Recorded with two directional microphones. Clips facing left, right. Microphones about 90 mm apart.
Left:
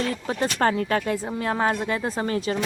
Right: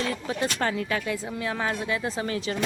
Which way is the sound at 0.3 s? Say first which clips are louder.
Left 7 dB; 40° left (ahead or behind).